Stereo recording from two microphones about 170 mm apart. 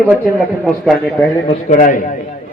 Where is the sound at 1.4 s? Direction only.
50° left (ahead or behind).